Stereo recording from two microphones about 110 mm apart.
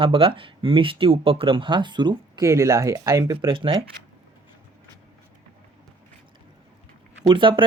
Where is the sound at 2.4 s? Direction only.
25° right (ahead or behind).